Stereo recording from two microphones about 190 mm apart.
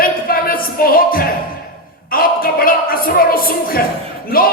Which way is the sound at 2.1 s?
50° left (ahead or behind).